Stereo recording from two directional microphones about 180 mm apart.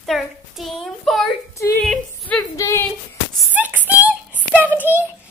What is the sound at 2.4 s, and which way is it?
Speech, 15° left (ahead or behind).